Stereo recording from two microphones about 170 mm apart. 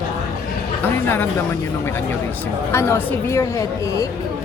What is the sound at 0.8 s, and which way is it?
Speech, 15° left (ahead or behind).